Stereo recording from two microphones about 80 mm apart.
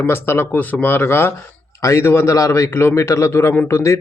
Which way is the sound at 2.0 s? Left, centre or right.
Left.